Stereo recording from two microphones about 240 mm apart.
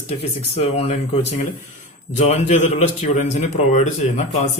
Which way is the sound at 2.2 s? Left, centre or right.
Left.